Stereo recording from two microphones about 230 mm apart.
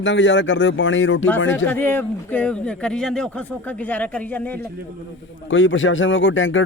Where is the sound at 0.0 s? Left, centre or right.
Left.